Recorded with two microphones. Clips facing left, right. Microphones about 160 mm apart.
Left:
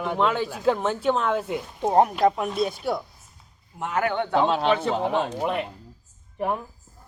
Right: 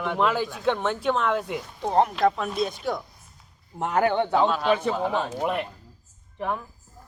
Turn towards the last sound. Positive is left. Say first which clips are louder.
# left 3 dB
turn(degrees=20)  # may be behind; listen again after turning